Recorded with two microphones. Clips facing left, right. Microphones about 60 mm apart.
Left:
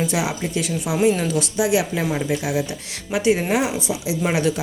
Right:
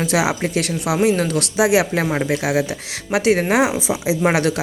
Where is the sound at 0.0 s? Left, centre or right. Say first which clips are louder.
Right 4 dB; right.